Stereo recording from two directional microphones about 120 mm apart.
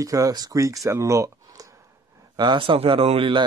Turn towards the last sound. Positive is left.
turn(degrees=-55)  # may be behind; listen again after turning